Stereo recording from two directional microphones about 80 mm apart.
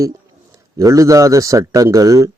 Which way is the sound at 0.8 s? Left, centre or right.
Right.